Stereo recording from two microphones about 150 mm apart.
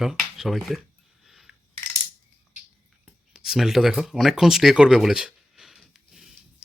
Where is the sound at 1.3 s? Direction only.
Centre (ahead or behind).